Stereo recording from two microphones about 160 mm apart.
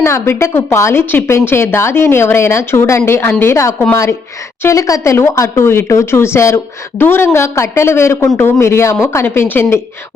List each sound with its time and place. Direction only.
0.0 s speech: 15° left (ahead or behind)